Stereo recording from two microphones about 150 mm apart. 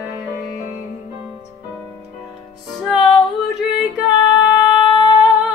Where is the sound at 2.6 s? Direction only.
Centre (ahead or behind).